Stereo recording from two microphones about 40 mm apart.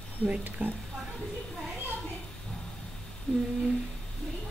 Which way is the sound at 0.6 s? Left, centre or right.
Right.